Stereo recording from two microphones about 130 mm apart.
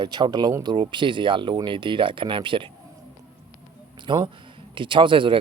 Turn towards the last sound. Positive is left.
turn(degrees=-40)  # may be behind; listen again after turning